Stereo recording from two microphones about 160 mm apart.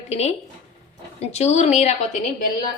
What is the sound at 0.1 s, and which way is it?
A woman's voice, 40° left (ahead or behind).